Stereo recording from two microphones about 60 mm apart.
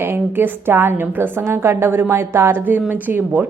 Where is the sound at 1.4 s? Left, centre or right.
Right.